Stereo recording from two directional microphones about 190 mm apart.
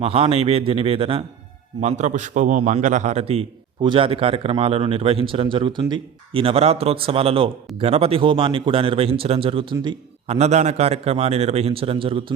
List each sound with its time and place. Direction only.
0.0 s a man's voice: 30° right (ahead or behind)